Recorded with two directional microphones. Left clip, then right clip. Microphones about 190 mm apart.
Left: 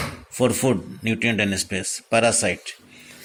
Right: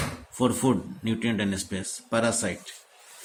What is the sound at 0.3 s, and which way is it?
Speech, 25° left (ahead or behind).